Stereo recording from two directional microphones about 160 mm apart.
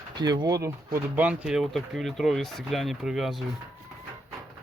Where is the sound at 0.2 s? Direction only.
25° right (ahead or behind).